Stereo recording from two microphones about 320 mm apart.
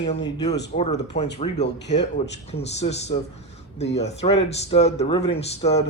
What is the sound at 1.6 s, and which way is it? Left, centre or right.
Speech, left.